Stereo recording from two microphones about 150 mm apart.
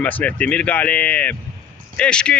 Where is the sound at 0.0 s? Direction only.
10° left (ahead or behind).